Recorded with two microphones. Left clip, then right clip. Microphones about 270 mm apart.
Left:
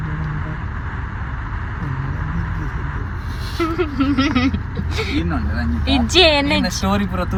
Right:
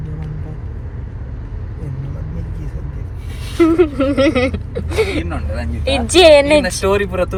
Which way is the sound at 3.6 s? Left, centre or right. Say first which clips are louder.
Right 6 dB; centre.